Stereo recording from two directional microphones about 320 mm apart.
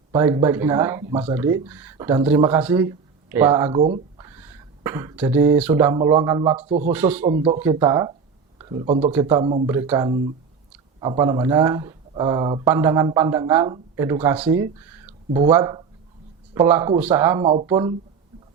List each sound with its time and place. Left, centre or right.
0.1 s speech: centre
4.3 s speech: centre
6.9 s speech: centre
7.3 s speech: centre